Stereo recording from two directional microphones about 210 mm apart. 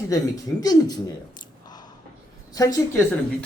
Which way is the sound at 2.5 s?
15° left (ahead or behind).